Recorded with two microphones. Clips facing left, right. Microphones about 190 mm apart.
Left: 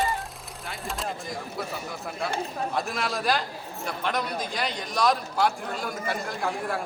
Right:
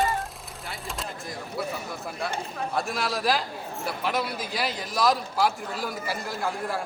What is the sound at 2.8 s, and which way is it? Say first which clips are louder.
A man's voice: right 2 dB; centre (ahead or behind).